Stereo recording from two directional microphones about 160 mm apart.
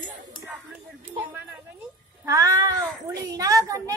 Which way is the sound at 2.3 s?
20° right (ahead or behind).